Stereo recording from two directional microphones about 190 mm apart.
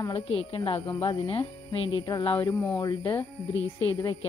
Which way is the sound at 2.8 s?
20° left (ahead or behind).